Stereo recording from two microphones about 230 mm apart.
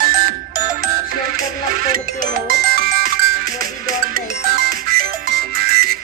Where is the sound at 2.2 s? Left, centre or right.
Right.